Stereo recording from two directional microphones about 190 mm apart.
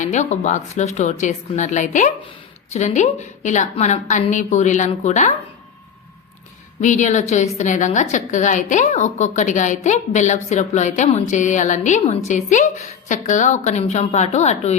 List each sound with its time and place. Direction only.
0.0 s a woman's voice: 40° left (ahead or behind)
6.8 s a woman's voice: 40° left (ahead or behind)